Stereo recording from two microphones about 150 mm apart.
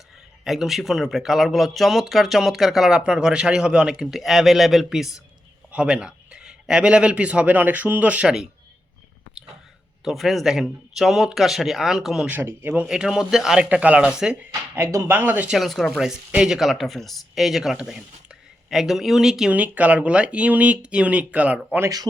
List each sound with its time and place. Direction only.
0.4 s a man's voice: centre (ahead or behind)
10.0 s speech: centre (ahead or behind)
12.3 s speech: 15° right (ahead or behind)
15.5 s speech: centre (ahead or behind)
21.8 s speech: 25° right (ahead or behind)